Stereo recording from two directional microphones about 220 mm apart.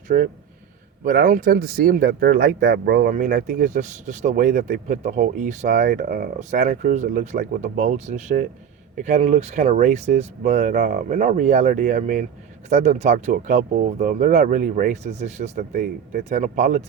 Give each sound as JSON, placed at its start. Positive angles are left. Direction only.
{"t": 0.1, "sound": "speech", "side_deg": -40}